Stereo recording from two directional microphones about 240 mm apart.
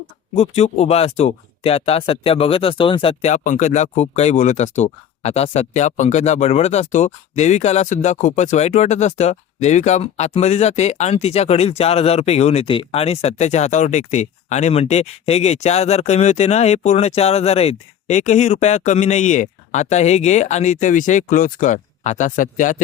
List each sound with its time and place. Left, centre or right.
0.3 s speech: left